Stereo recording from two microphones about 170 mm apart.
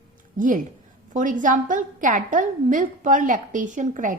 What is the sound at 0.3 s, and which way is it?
A woman's voice, 50° right (ahead or behind).